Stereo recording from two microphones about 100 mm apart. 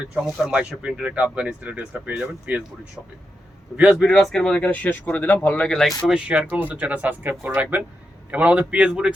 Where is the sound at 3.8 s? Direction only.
5° right (ahead or behind).